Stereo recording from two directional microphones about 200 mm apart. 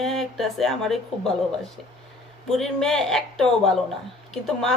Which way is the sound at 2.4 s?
Centre (ahead or behind).